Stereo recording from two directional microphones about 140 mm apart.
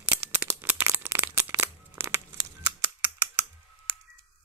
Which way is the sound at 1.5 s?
15° right (ahead or behind).